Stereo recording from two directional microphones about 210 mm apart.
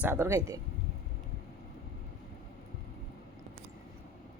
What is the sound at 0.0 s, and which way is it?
Speech, 10° right (ahead or behind).